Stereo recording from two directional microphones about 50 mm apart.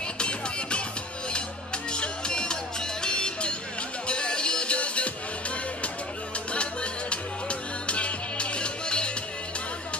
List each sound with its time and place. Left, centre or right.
0.2 s music: left
1.9 s music: centre
6.5 s music: left